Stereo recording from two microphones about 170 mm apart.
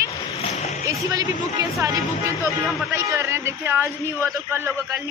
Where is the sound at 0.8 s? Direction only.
20° right (ahead or behind).